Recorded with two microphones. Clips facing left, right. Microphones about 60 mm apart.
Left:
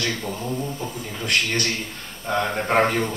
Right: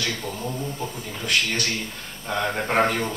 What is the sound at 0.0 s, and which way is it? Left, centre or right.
Speech, centre.